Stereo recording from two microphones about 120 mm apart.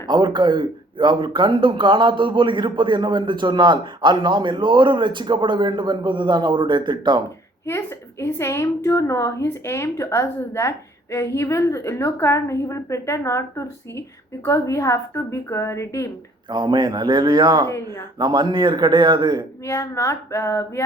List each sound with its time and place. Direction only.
0.1 s speech: 40° right (ahead or behind)
7.7 s a woman's voice: 25° left (ahead or behind)
16.5 s speech: 40° right (ahead or behind)
17.7 s a woman's voice: 25° left (ahead or behind)
18.2 s speech: 35° right (ahead or behind)
19.6 s a woman's voice: 25° left (ahead or behind)